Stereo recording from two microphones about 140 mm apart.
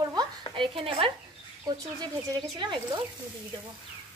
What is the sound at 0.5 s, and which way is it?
Speech, 40° right (ahead or behind).